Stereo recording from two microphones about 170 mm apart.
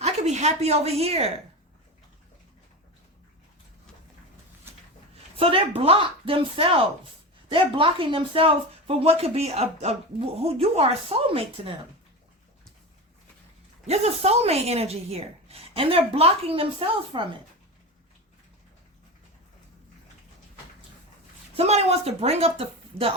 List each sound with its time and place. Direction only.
0.0 s a woman's voice: 40° right (ahead or behind)
5.4 s speech: 35° right (ahead or behind)
13.8 s speech: 40° right (ahead or behind)
21.5 s speech: 40° right (ahead or behind)